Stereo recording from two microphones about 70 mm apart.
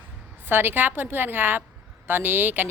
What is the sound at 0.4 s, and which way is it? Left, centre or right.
Speech, right.